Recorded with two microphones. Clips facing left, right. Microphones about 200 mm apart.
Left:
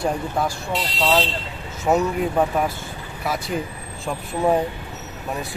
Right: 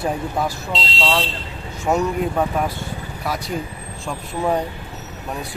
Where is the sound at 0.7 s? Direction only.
25° right (ahead or behind).